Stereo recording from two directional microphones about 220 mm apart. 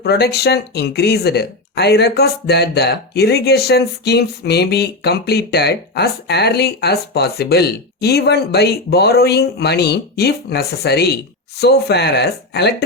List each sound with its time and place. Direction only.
0.0 s speech: 45° left (ahead or behind)